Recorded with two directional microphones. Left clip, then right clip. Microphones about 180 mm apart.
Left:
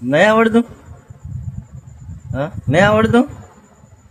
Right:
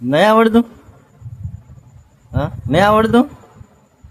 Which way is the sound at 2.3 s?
15° right (ahead or behind).